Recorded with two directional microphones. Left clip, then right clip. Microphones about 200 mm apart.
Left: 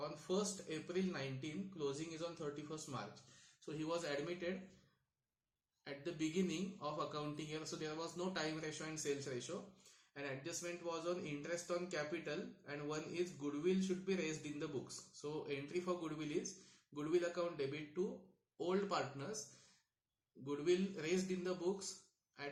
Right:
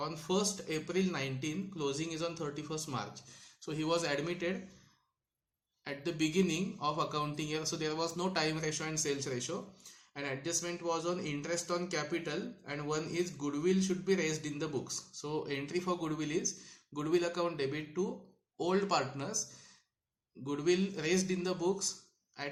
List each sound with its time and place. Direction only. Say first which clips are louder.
0.5 s speech: right 8 dB; 45° right (ahead or behind)
5.8 s speech: right 9 dB; 40° right (ahead or behind)
20.4 s speech: right 6 dB; 40° right (ahead or behind)